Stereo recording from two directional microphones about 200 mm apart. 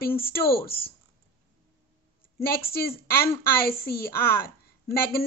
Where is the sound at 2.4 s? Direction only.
50° left (ahead or behind).